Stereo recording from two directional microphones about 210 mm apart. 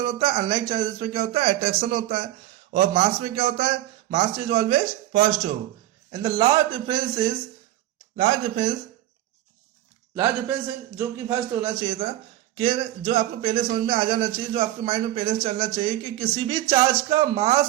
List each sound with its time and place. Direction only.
0.0 s speech: 25° right (ahead or behind)
6.1 s speech: 20° right (ahead or behind)
10.2 s a man's voice: 10° right (ahead or behind)
12.5 s speech: 30° right (ahead or behind)